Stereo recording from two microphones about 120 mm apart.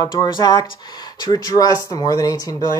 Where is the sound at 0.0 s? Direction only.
35° left (ahead or behind).